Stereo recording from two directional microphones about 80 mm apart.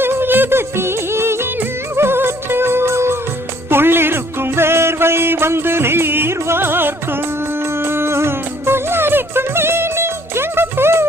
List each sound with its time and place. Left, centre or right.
0.0 s music: right